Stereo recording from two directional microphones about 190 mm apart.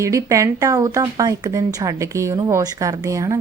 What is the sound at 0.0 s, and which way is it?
Speech, 15° right (ahead or behind).